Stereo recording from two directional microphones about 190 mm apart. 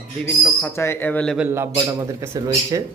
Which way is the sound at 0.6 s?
10° left (ahead or behind).